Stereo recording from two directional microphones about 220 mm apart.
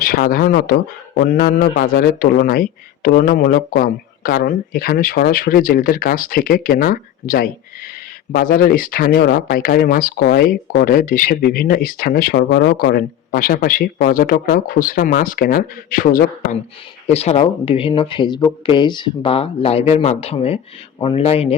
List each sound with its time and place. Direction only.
0.0 s speech: 40° left (ahead or behind)